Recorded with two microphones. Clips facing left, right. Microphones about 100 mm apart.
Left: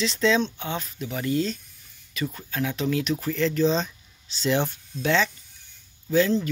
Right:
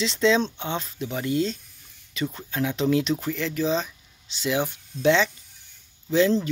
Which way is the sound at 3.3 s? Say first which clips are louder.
Left 6 dB; 10° right (ahead or behind).